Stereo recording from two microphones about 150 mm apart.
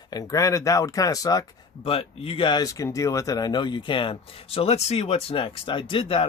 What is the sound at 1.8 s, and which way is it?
Speech, 40° left (ahead or behind).